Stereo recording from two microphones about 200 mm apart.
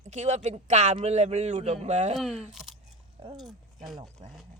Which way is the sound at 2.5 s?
Centre (ahead or behind).